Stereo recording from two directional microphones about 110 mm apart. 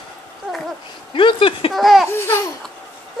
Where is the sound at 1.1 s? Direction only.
50° left (ahead or behind).